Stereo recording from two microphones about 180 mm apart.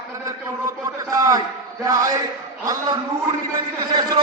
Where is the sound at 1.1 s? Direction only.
20° right (ahead or behind).